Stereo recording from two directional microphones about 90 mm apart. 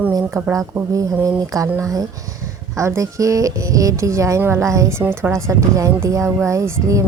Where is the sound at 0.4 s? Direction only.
40° right (ahead or behind).